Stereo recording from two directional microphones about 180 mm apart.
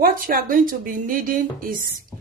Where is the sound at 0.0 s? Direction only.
50° right (ahead or behind).